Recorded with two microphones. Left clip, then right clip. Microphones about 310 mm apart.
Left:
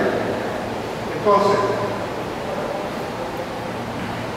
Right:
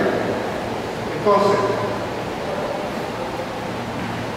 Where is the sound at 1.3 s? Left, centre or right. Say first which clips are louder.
Even; centre.